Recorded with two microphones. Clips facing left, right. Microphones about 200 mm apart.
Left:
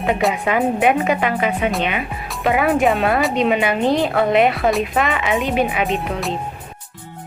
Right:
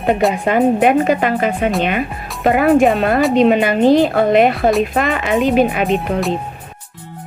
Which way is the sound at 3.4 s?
45° right (ahead or behind).